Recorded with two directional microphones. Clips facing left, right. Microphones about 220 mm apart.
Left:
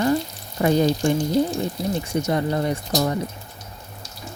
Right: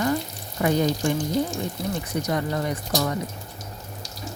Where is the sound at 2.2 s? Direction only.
30° left (ahead or behind).